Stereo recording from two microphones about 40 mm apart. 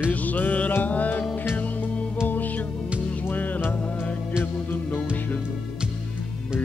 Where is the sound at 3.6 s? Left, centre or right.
Left.